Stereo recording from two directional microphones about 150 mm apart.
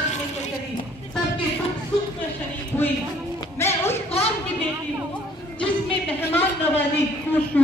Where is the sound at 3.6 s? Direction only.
15° left (ahead or behind).